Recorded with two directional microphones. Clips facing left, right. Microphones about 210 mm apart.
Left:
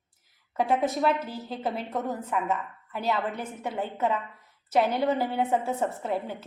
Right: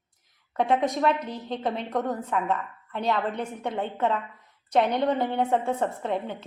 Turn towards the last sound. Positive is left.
turn(degrees=5)  # may be behind; listen again after turning